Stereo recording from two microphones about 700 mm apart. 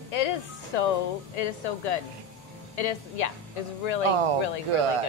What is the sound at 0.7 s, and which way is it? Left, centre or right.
Speech, left.